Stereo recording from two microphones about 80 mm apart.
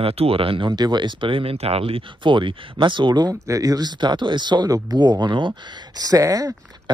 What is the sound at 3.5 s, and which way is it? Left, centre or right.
Speech, right.